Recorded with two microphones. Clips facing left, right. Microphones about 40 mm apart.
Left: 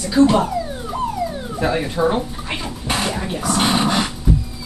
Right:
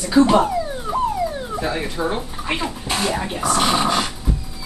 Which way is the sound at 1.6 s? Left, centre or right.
Centre.